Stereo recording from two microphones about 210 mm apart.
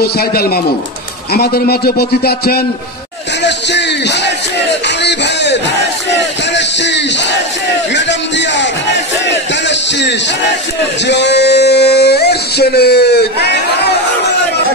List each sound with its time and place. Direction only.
0.0 s a man's voice: 45° left (ahead or behind)
3.4 s music: 55° left (ahead or behind)
6.0 s battle cry: 55° left (ahead or behind)
11.1 s a sound: 55° left (ahead or behind)